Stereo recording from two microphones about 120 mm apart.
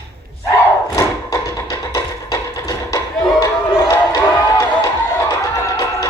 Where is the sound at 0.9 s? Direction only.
30° left (ahead or behind).